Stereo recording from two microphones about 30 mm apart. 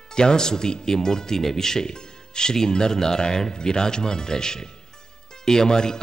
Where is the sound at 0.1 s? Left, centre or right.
Left.